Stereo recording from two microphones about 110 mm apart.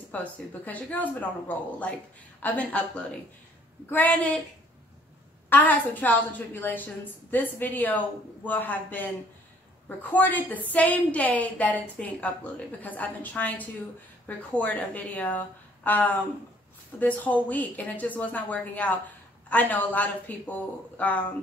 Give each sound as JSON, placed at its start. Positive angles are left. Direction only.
{"t": 0.1, "sound": "speech", "side_deg": 15}
{"t": 5.5, "sound": "speech", "side_deg": 15}